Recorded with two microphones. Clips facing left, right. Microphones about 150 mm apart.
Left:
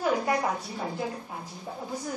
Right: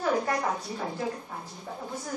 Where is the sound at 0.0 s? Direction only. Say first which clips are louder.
Left 1 dB; 10° left (ahead or behind).